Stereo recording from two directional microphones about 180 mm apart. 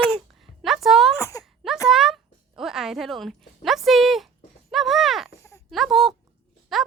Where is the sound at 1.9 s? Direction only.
5° right (ahead or behind).